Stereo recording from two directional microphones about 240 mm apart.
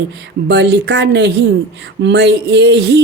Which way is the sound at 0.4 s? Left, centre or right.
Right.